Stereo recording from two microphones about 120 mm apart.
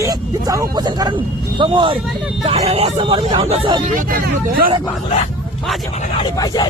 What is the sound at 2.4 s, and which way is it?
Speech, 55° right (ahead or behind).